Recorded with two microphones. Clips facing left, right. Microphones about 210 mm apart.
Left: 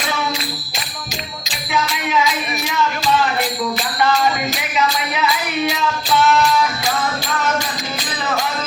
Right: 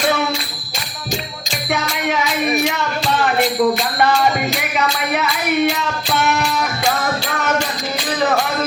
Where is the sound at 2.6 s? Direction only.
60° right (ahead or behind).